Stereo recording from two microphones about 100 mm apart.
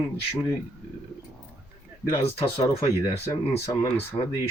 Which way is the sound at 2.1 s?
80° left.